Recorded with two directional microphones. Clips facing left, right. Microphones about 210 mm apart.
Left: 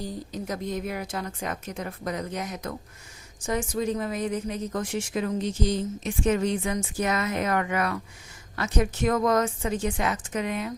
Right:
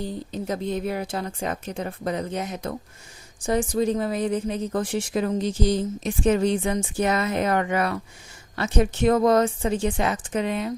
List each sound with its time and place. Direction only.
0.0 s a woman's voice: 25° right (ahead or behind)